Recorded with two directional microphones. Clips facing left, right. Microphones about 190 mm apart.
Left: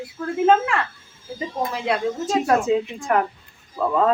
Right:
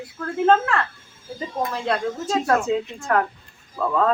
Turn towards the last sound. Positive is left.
turn(degrees=15)  # may be behind; listen again after turning